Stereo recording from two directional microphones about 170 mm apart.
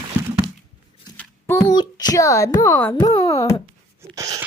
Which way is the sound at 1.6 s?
25° left (ahead or behind).